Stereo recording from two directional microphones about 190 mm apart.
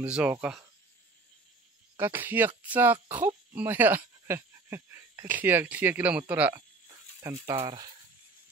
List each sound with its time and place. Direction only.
0.0 s speech: 5° right (ahead or behind)
2.0 s speech: 10° right (ahead or behind)
7.6 s speech: 25° right (ahead or behind)